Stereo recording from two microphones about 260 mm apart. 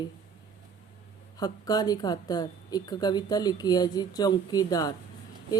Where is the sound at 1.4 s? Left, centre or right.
Centre.